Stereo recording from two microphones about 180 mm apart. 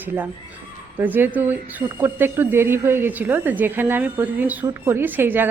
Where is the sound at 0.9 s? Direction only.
10° right (ahead or behind).